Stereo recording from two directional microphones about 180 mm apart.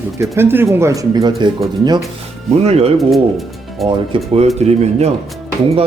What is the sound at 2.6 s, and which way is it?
Speech, 35° right (ahead or behind).